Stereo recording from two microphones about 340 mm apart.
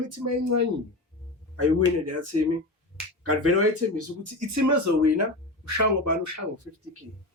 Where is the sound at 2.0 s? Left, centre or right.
Right.